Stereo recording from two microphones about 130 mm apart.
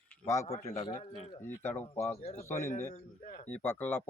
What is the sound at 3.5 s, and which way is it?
Speech, 15° left (ahead or behind).